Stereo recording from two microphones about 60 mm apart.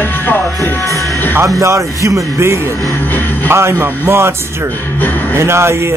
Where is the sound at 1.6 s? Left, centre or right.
Right.